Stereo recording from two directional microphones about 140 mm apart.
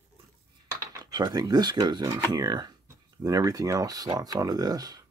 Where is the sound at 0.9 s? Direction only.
30° right (ahead or behind).